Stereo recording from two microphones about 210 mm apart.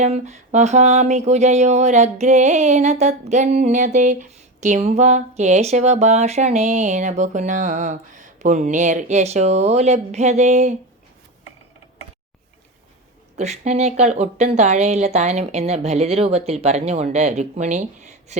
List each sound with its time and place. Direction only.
0.0 s speech: 35° right (ahead or behind)
13.3 s speech: 30° right (ahead or behind)